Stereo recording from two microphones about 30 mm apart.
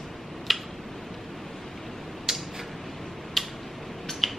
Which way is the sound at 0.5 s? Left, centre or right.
Centre.